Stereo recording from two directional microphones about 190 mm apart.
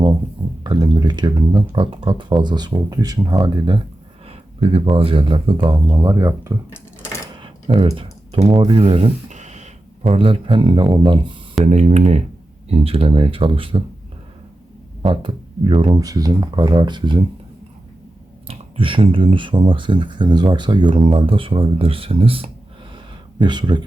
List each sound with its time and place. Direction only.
0.6 s speech: 25° right (ahead or behind)
7.4 s typing: 25° right (ahead or behind)
8.4 s speech: 25° right (ahead or behind)
11.6 s speech: 35° right (ahead or behind)
15.0 s speech: 25° right (ahead or behind)
18.4 s speech: 25° right (ahead or behind)